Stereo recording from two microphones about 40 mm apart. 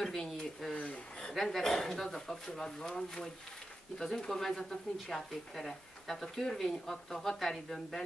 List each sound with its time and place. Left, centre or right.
0.0 s a sound: centre
0.4 s speech: centre
0.7 s a man's voice: left
1.3 s speech: centre
4.3 s speech: centre